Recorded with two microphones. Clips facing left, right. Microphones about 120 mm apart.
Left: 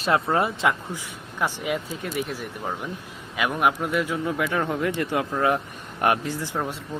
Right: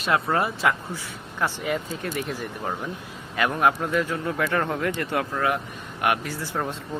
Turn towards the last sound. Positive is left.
turn(degrees=10)  # may be behind; listen again after turning